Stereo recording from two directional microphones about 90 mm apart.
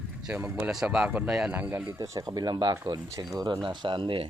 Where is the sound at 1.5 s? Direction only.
25° right (ahead or behind).